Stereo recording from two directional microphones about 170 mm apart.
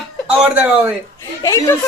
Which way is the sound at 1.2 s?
20° left (ahead or behind).